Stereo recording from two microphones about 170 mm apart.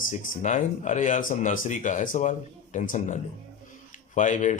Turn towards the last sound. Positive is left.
turn(degrees=45)  # may be behind; listen again after turning